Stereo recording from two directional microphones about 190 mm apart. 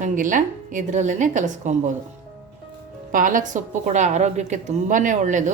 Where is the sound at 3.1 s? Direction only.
45° right (ahead or behind).